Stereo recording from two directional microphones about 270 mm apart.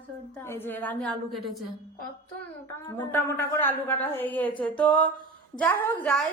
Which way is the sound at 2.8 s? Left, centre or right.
Centre.